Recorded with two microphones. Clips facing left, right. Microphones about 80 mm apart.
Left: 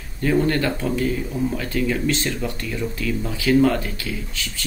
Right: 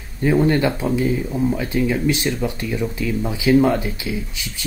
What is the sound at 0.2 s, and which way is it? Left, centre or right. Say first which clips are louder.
Speech: right 3 dB; centre.